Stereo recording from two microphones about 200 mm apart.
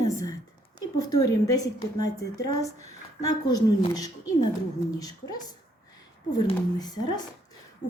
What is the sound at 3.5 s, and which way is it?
A woman's voice, 20° left (ahead or behind).